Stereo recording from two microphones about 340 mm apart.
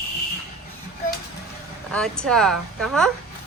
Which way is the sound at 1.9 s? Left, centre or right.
Centre.